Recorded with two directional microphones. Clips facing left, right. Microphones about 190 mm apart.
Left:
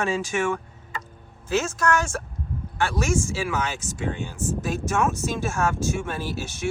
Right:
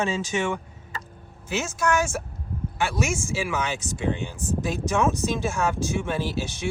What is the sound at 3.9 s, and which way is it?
Speech, 15° right (ahead or behind).